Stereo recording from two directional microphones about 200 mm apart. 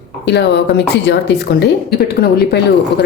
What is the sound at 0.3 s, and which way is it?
Speech, 60° left (ahead or behind).